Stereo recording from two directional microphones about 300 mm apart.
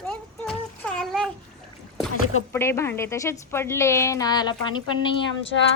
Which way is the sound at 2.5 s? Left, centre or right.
Centre.